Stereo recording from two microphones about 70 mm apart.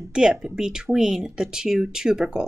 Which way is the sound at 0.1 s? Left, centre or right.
Centre.